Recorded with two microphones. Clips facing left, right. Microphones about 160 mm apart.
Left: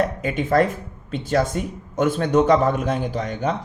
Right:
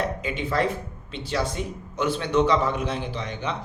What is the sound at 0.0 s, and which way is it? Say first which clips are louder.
Speech: left 5 dB; 50° left (ahead or behind).